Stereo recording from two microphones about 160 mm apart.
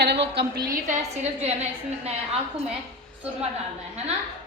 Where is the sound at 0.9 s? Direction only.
45° right (ahead or behind).